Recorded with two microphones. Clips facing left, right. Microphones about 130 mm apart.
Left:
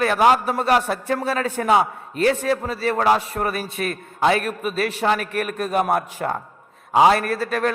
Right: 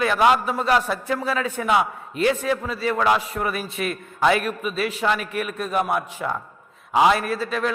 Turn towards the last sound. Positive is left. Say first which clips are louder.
# left 2 dB
turn(degrees=55)  # may be behind; listen again after turning